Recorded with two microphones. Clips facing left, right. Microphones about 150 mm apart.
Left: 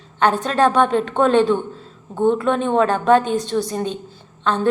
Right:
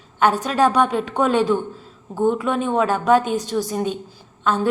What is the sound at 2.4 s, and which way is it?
Speech, 5° right (ahead or behind).